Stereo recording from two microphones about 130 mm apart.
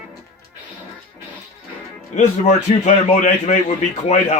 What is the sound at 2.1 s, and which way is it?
A man's voice, 65° left (ahead or behind).